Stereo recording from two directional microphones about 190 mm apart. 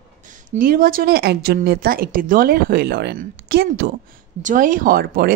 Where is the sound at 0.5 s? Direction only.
50° right (ahead or behind).